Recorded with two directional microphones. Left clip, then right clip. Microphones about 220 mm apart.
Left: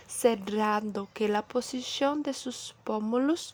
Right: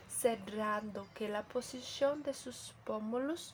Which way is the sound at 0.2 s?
40° left (ahead or behind).